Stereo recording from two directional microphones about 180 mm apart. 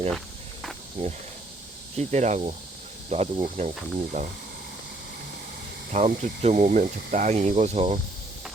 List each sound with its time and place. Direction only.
1.0 s speech: 40° right (ahead or behind)
5.9 s speech: 45° right (ahead or behind)